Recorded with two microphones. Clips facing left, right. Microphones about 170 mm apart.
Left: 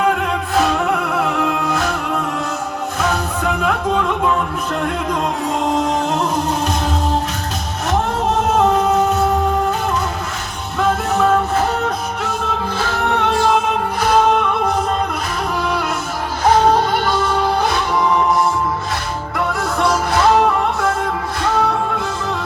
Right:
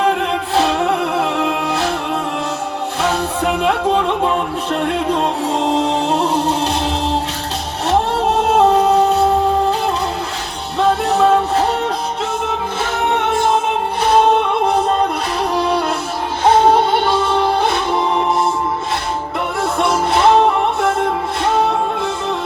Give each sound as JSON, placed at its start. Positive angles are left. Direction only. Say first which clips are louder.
{"t": 0.5, "sound": "music", "louder": "right 1 dB", "side_deg": -30}
{"t": 3.0, "sound": "music", "louder": "right 2 dB", "side_deg": -30}
{"t": 8.5, "sound": "music", "louder": "right 3 dB", "side_deg": -30}
{"t": 10.8, "sound": "music", "louder": "right 3 dB", "side_deg": -30}
{"t": 12.8, "sound": "music", "louder": "right 1 dB", "side_deg": -20}
{"t": 15.5, "sound": "music", "louder": "right 4 dB", "side_deg": -30}
{"t": 19.8, "sound": "music", "louder": "right 1 dB", "side_deg": -25}